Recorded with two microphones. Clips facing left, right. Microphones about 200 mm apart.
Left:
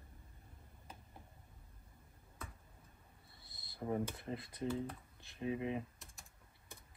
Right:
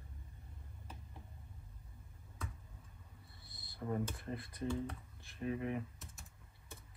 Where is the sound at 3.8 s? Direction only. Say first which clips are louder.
Left 1 dB; 20° left (ahead or behind).